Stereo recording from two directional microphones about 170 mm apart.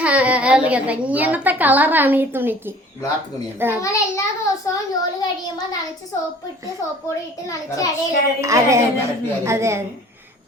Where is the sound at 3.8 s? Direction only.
20° left (ahead or behind).